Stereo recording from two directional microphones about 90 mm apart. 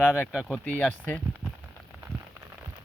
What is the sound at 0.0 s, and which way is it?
Speech, 20° left (ahead or behind).